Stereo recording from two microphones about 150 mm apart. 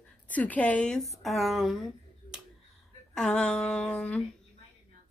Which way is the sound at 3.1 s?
5° left (ahead or behind).